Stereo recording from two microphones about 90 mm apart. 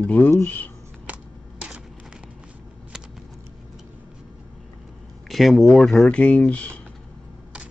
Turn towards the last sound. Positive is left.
turn(degrees=15)  # may be behind; listen again after turning